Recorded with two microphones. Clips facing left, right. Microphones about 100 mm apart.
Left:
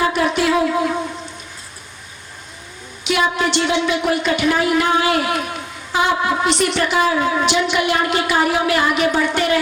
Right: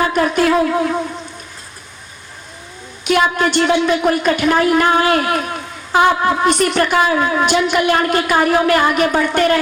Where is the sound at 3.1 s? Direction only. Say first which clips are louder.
Right 3 dB; 45° right (ahead or behind).